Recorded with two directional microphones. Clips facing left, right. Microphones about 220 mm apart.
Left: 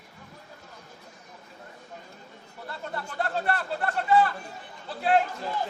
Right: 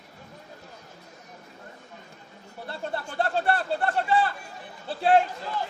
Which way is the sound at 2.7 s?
30° right (ahead or behind).